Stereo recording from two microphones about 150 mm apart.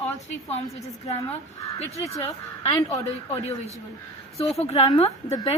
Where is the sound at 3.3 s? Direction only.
45° left (ahead or behind).